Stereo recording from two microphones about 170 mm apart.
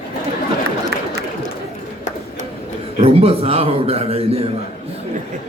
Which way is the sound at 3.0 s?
35° right (ahead or behind).